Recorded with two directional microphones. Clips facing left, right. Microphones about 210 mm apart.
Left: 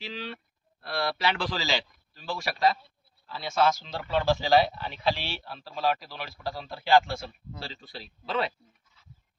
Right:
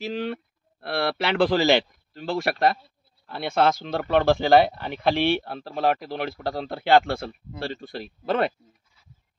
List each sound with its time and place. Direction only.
0.0 s speech: 50° right (ahead or behind)